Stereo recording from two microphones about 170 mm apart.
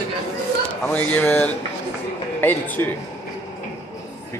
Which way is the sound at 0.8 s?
10° left (ahead or behind).